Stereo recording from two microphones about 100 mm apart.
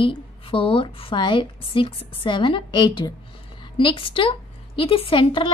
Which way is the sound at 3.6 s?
55° left (ahead or behind).